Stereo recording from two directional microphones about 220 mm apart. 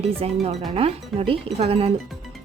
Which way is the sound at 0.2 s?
25° right (ahead or behind).